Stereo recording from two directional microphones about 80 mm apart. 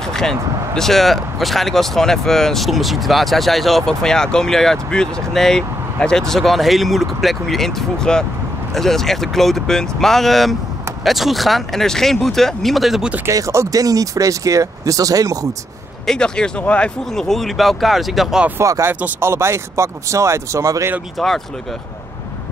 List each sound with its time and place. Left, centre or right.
0.0 s speech: centre
13.3 s speech: right
16.1 s speech: centre
18.6 s speech: right
18.9 s speech: right
21.2 s speech: centre